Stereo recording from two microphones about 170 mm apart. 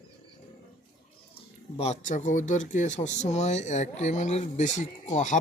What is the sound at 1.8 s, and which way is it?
Speech, 45° left (ahead or behind).